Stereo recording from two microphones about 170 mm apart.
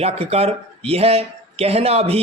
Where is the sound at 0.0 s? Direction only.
35° right (ahead or behind).